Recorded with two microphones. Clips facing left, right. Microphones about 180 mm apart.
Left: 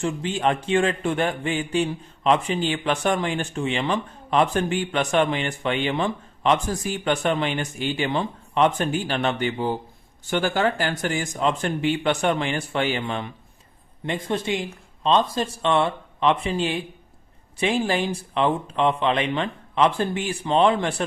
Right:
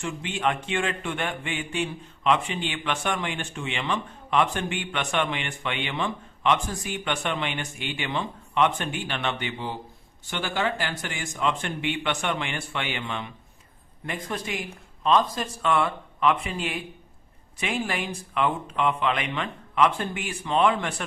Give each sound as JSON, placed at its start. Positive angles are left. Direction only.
{"t": 0.0, "sound": "a man's voice", "side_deg": 35}
{"t": 14.1, "sound": "a man's voice", "side_deg": 25}